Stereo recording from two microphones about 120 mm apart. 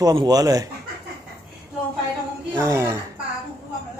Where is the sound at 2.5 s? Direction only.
25° right (ahead or behind).